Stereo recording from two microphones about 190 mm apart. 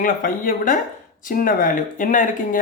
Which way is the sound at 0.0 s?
45° left (ahead or behind).